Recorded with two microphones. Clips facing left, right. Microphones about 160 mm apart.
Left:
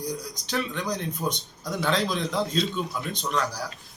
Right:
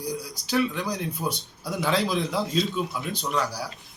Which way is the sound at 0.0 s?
5° right (ahead or behind).